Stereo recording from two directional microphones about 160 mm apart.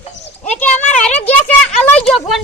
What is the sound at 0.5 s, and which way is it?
Speech, 10° left (ahead or behind).